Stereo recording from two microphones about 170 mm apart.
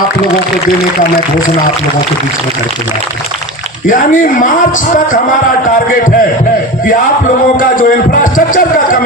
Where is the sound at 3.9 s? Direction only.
50° left (ahead or behind).